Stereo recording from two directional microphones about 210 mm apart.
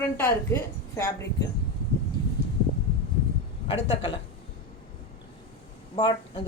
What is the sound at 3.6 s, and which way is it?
Speech, 25° left (ahead or behind).